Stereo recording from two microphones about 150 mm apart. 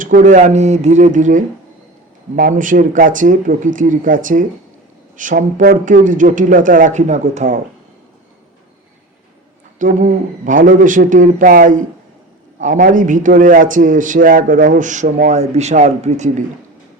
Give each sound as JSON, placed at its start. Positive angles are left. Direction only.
{"t": 0.0, "sound": "a man's voice", "side_deg": -60}
{"t": 9.7, "sound": "a man's voice", "side_deg": -60}
{"t": 15.3, "sound": "speech", "side_deg": -45}